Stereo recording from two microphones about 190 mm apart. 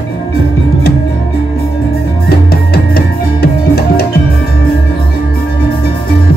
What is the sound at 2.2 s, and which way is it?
Music, 55° left (ahead or behind).